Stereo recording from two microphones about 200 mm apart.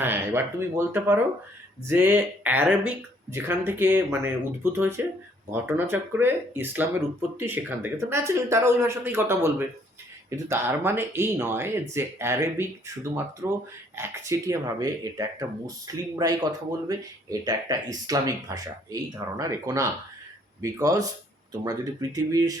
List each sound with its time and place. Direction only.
0.0 s speech: 10° right (ahead or behind)